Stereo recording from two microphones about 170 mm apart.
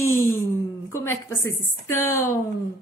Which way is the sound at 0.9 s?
15° left (ahead or behind).